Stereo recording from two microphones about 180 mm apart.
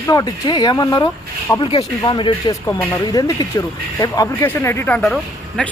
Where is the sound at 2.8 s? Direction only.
10° left (ahead or behind).